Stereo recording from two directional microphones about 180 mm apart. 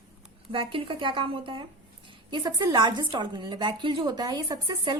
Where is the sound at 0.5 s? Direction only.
30° right (ahead or behind).